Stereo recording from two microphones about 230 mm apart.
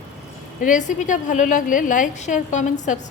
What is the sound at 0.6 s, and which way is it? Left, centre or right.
A woman's voice, left.